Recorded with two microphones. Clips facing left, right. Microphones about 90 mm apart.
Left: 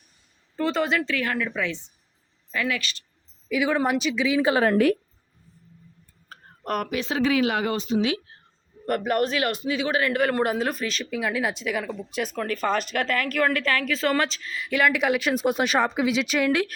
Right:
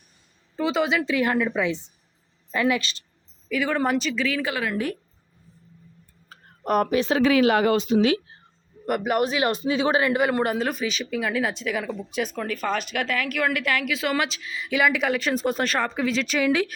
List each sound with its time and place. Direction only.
0.5 s speech: 5° right (ahead or behind)
1.1 s a man's voice: 20° right (ahead or behind)
3.5 s speech: 5° left (ahead or behind)
4.4 s a woman's voice: 30° left (ahead or behind)
6.3 s tick-tock: 55° left (ahead or behind)
6.8 s speech: 35° right (ahead or behind)
7.1 s speech: 65° right (ahead or behind)
8.9 s a man's voice: 10° right (ahead or behind)
10.3 s speech: centre (ahead or behind)